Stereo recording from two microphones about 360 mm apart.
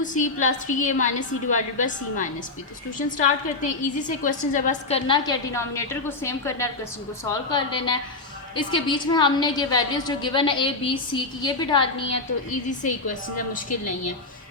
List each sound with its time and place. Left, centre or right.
0.0 s a woman's voice: left